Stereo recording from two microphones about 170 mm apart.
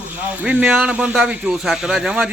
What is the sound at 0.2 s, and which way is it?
A man's voice, 10° right (ahead or behind).